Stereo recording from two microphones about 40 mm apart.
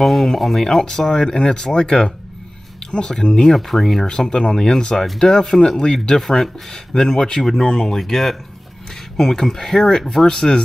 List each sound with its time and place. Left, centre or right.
0.0 s speech: centre
3.4 s speech: centre
4.1 s speech: centre